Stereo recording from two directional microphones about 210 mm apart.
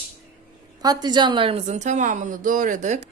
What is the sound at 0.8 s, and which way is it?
A woman's voice, 20° right (ahead or behind).